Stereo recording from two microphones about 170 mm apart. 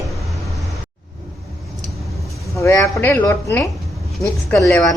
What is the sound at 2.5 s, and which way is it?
Speech, 20° left (ahead or behind).